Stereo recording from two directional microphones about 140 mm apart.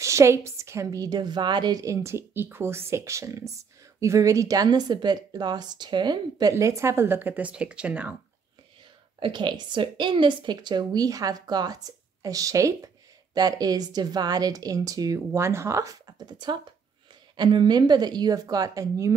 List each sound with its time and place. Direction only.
0.0 s a woman's voice: 20° right (ahead or behind)
9.2 s a woman's voice: 35° right (ahead or behind)